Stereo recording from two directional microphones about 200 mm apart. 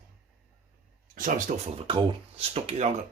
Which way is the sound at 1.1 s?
40° right (ahead or behind).